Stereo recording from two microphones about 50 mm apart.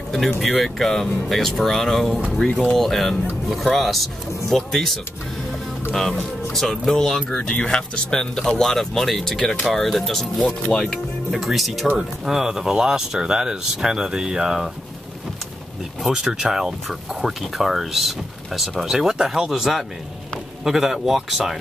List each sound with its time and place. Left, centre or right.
0.6 s speech: centre
2.3 s speech: centre
2.7 s speech: centre
6.5 s speech: centre
7.2 s speech: centre
9.4 s speech: centre
9.7 s speech: centre
10.4 s speech: centre
11.2 s speech: centre
16.3 s speech: centre